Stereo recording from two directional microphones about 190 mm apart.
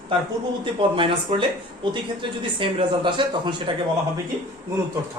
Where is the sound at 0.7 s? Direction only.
25° right (ahead or behind).